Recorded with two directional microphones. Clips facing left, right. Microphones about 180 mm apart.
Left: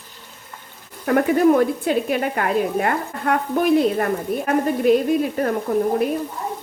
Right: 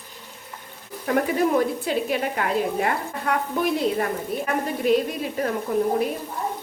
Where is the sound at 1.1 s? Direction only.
60° left (ahead or behind).